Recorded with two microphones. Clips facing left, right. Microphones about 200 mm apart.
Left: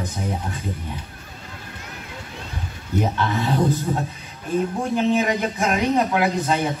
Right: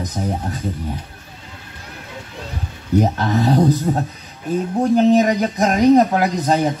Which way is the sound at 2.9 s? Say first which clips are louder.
Right 5 dB; 40° right (ahead or behind).